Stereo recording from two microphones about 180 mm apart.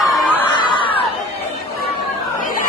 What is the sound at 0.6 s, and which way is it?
Crowd, 25° left (ahead or behind).